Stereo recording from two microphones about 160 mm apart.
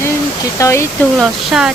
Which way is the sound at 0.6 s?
15° left (ahead or behind).